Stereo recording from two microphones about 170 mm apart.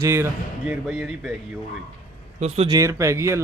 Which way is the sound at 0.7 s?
Centre (ahead or behind).